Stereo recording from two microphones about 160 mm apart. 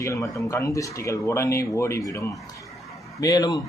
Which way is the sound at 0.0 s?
20° left (ahead or behind).